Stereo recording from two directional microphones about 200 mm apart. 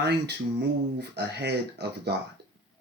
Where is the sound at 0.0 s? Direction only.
55° right (ahead or behind).